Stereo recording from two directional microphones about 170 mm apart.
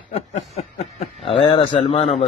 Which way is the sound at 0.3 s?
40° left (ahead or behind).